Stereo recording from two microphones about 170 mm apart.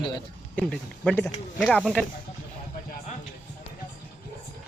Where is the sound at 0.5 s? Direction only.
5° left (ahead or behind).